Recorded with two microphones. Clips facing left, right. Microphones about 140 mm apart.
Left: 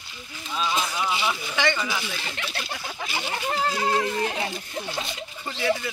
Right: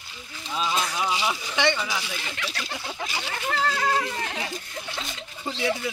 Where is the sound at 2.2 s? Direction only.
30° left (ahead or behind).